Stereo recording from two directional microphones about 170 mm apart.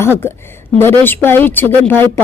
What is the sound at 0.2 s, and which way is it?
A woman's voice, 15° left (ahead or behind).